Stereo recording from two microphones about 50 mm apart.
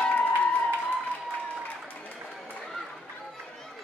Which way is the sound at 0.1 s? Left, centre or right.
Left.